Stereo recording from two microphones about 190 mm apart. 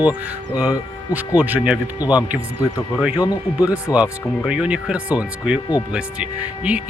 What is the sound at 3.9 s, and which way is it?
Speech, 20° left (ahead or behind).